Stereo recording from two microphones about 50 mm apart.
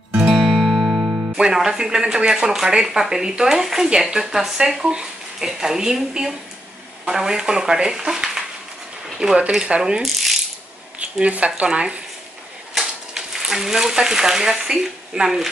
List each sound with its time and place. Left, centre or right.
0.2 s music: centre
1.3 s speech: centre
9.5 s speech: centre
11.2 s speech: right
12.7 s speech: centre